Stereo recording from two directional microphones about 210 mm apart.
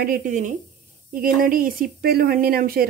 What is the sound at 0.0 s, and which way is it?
Speech, 40° right (ahead or behind).